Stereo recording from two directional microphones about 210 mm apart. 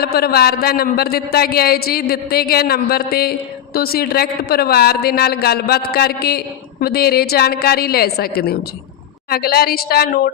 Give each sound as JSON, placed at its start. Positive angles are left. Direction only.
{"t": 0.0, "sound": "a man's voice", "side_deg": 50}